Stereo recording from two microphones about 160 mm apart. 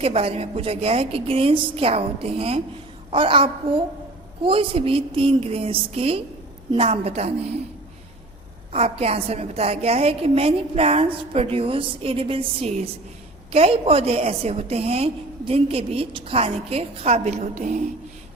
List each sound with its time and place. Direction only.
0.0 s a woman's voice: 35° right (ahead or behind)
8.7 s a woman's voice: 40° right (ahead or behind)